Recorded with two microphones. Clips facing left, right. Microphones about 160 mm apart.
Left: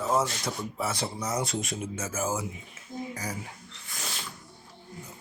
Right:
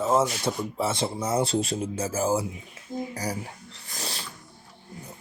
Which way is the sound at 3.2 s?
35° right (ahead or behind).